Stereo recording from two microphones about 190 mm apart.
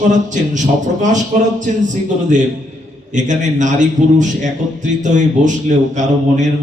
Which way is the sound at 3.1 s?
40° right (ahead or behind).